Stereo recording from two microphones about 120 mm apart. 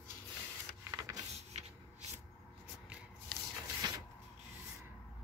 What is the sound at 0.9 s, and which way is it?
Printer, 30° right (ahead or behind).